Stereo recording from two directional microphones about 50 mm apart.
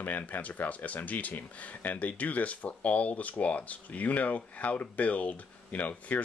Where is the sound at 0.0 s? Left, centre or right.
Left.